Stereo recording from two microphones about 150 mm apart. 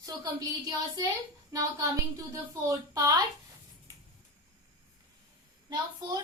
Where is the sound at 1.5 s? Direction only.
20° right (ahead or behind).